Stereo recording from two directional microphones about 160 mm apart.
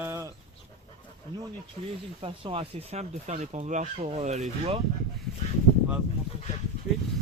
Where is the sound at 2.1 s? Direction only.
35° right (ahead or behind).